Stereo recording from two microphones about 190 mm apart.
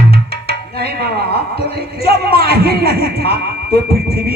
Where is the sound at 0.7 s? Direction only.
55° right (ahead or behind).